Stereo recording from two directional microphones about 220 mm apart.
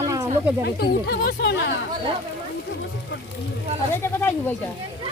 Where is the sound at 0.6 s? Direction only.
45° left (ahead or behind).